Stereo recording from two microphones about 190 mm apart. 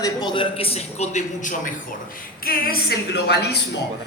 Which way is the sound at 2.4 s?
50° left (ahead or behind).